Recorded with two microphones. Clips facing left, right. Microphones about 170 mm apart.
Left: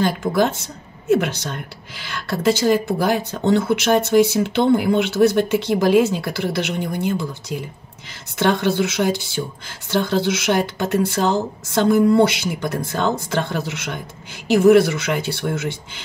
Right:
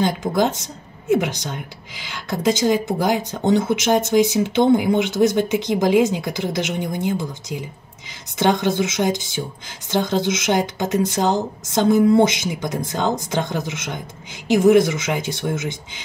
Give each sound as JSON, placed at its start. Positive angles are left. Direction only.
{"t": 0.2, "sound": "speech", "side_deg": -15}